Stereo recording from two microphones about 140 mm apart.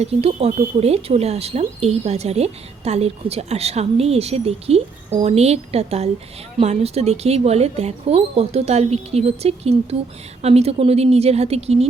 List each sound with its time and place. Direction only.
0.0 s speech: 45° right (ahead or behind)